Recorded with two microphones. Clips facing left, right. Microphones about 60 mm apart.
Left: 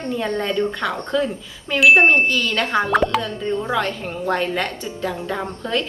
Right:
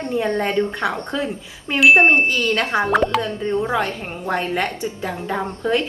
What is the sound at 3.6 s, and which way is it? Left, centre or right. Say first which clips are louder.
A woman's voice: right 1 dB; right.